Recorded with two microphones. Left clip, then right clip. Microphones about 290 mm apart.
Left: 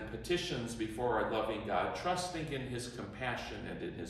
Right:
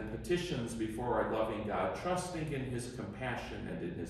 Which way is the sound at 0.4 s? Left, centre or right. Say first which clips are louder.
Even; centre.